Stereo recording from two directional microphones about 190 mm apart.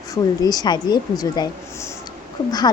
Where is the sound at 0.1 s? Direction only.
20° left (ahead or behind).